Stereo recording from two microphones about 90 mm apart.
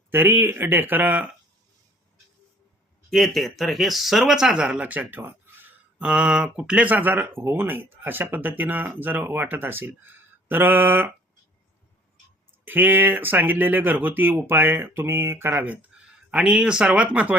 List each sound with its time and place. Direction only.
0.1 s speech: 25° right (ahead or behind)
3.1 s speech: centre (ahead or behind); by 5.6 s 20° right (ahead or behind)
6.0 s speech: 10° right (ahead or behind)
12.6 s speech: 20° right (ahead or behind)